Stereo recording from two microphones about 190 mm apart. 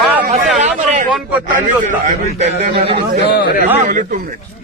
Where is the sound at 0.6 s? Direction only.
40° right (ahead or behind).